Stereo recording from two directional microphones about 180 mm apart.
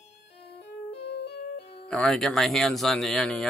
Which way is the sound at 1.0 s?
70° left (ahead or behind).